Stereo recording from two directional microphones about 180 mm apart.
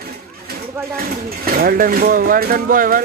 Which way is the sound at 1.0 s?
55° right (ahead or behind).